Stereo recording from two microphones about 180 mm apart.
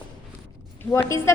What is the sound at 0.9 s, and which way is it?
Speech, 15° left (ahead or behind).